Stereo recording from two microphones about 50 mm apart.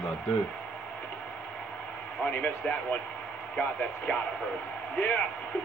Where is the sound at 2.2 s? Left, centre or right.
Left.